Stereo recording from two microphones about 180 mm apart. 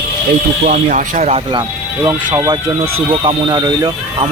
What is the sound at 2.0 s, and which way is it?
Speech, 20° right (ahead or behind).